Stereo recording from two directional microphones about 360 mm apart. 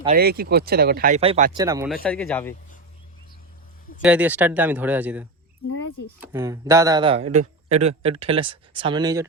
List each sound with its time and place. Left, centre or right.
0.0 s speech: right
1.5 s speech: centre
4.0 s speech: centre